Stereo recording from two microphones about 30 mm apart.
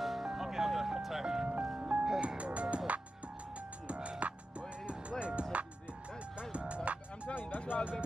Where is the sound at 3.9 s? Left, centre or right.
Right.